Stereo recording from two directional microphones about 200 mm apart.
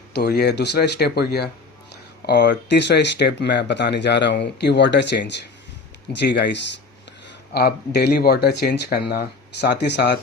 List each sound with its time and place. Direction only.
0.1 s speech: 55° left (ahead or behind)